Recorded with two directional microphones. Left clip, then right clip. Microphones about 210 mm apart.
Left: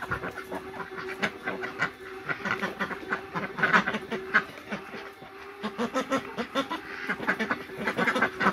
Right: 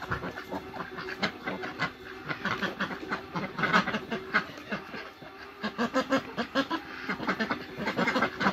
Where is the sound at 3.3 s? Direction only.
5° right (ahead or behind).